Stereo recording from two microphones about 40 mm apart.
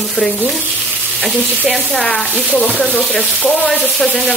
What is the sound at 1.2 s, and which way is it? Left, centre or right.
Sizzle, centre.